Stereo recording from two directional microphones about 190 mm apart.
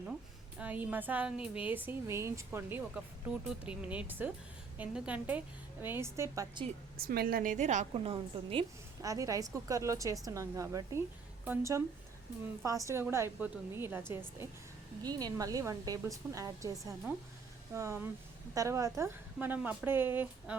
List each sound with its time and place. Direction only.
0.6 s speech: 10° right (ahead or behind)
7.0 s a woman's voice: 55° right (ahead or behind); by 8.6 s 30° right (ahead or behind)
9.0 s a woman's voice: 15° right (ahead or behind)